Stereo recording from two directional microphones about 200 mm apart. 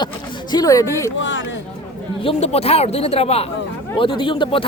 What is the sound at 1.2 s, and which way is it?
Speech, 65° left (ahead or behind).